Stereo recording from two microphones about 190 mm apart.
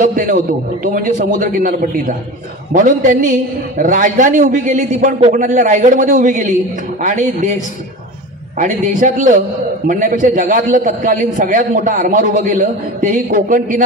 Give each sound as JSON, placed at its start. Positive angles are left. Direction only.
{"t": 0.0, "sound": "a man's voice", "side_deg": -45}
{"t": 8.5, "sound": "a man's voice", "side_deg": -40}